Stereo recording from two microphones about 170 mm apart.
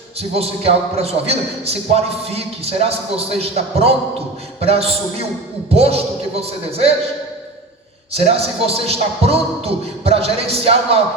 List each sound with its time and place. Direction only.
0.2 s a man's voice: 35° right (ahead or behind)
8.1 s a man's voice: 35° right (ahead or behind)